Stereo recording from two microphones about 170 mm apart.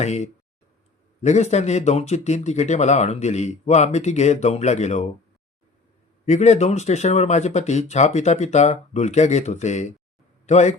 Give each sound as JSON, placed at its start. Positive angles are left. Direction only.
{"t": 0.0, "sound": "speech", "side_deg": 40}
{"t": 6.2, "sound": "speech", "side_deg": 40}